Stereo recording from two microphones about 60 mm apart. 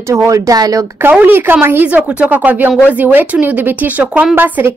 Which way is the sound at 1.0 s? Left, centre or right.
Right.